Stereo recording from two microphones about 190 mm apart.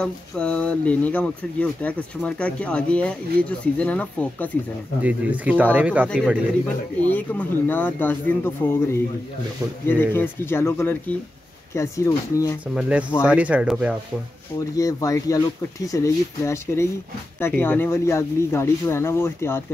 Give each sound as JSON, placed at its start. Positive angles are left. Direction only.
{"t": 0.0, "sound": "speech", "side_deg": 5}
{"t": 5.0, "sound": "speech", "side_deg": -10}
{"t": 7.0, "sound": "speech", "side_deg": 10}
{"t": 12.7, "sound": "speech", "side_deg": -5}
{"t": 14.8, "sound": "speech", "side_deg": 20}